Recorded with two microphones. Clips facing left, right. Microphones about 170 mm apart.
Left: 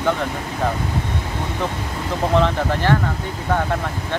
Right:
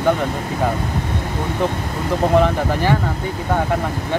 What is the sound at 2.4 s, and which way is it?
Speech, 10° right (ahead or behind).